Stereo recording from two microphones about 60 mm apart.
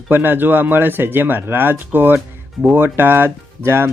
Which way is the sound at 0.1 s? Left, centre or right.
Right.